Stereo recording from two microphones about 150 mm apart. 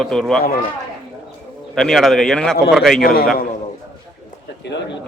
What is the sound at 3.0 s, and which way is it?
Speech, 80° left.